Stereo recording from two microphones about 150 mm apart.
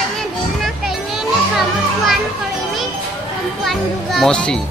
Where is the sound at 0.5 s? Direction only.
Centre (ahead or behind).